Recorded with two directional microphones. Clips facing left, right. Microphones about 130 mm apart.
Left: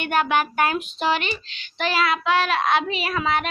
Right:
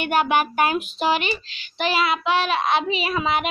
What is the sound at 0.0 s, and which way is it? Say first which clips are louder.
A child's voice: right 1 dB; 10° right (ahead or behind).